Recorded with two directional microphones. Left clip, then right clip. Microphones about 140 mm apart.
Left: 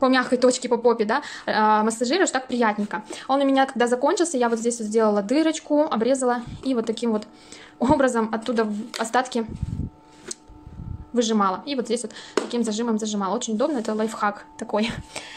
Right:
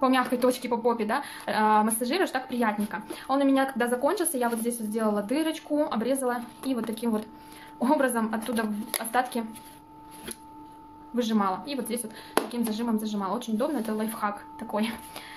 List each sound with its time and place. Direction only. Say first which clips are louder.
0.0 s a woman's voice: left 5 dB; 35° left (ahead or behind)
11.1 s a woman's voice: left 6 dB; 35° left (ahead or behind)